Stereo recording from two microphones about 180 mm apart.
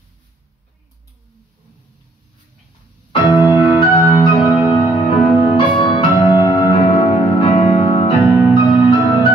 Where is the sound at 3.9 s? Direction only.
25° left (ahead or behind).